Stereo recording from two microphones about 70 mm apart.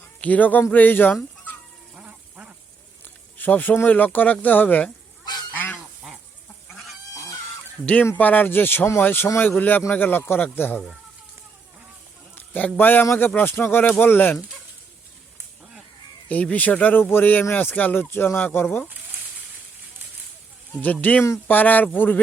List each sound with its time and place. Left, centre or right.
0.2 s speech: left
2.0 s quack: centre
3.3 s speech: left
5.5 s goose: left
6.7 s goose: centre
7.1 s fowl: left
8.1 s speech: left
12.7 s speech: left
16.3 s speech: left
20.7 s speech: left